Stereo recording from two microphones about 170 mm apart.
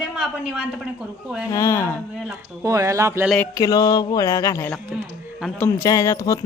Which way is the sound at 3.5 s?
20° left (ahead or behind).